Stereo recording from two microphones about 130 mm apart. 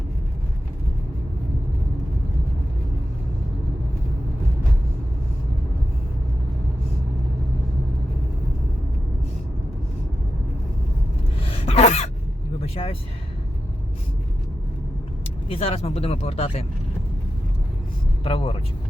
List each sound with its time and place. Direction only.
11.3 s gasp: 50° left (ahead or behind)
12.6 s vehicle: 50° left (ahead or behind)
15.4 s speech: 45° left (ahead or behind)
18.2 s speech: 45° left (ahead or behind)